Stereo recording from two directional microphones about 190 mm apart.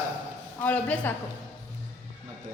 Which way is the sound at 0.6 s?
10° left (ahead or behind).